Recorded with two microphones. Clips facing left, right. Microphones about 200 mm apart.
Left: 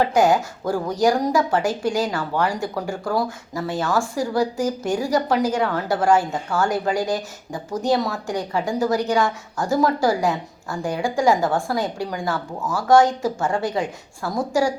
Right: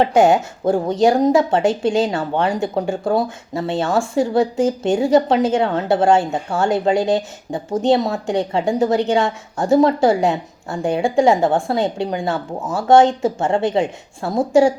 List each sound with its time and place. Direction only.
0.0 s speech: 25° right (ahead or behind)